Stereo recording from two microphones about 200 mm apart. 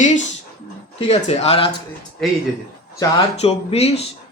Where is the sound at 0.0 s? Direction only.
35° left (ahead or behind).